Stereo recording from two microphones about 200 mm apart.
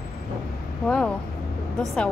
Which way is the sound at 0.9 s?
5° left (ahead or behind).